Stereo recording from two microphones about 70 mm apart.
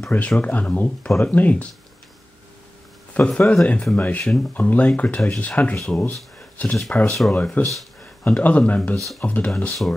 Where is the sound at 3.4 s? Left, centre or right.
Centre.